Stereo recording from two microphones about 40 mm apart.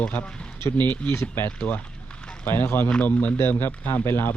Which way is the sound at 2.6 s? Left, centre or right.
Left.